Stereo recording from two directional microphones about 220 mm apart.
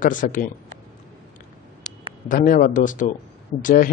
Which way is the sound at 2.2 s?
35° left (ahead or behind).